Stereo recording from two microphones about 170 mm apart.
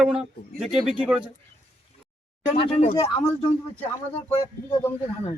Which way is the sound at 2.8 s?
45° left (ahead or behind).